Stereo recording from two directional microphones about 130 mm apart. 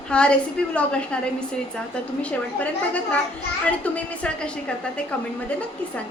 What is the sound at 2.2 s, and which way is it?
A woman's voice, 10° left (ahead or behind).